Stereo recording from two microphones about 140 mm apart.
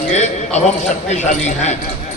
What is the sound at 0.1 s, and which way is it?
A man's voice, 55° left (ahead or behind).